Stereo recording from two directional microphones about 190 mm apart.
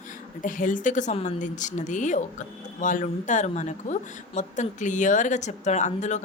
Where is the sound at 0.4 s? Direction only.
45° left (ahead or behind).